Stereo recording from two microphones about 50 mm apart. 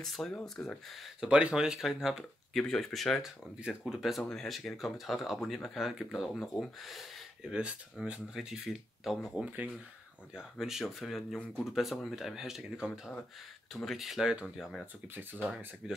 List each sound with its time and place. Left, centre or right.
0.0 s speech: centre
1.2 s speech: centre
2.5 s speech: centre
4.2 s speech: centre
7.5 s speech: centre
8.4 s speech: centre
15.1 s speech: right